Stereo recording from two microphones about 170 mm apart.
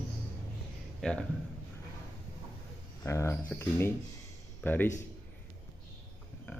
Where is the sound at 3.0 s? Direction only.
15° left (ahead or behind).